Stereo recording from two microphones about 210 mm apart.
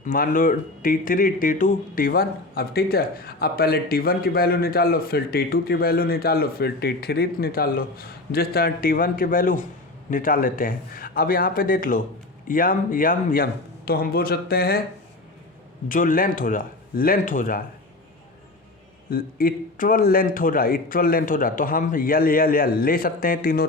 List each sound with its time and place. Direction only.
0.0 s speech: 40° left (ahead or behind)
15.9 s speech: 40° left (ahead or behind)
19.1 s speech: 45° left (ahead or behind)